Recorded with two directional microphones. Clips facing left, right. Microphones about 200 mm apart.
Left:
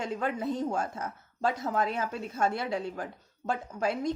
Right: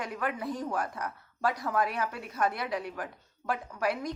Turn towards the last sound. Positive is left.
turn(degrees=25)  # may be behind; listen again after turning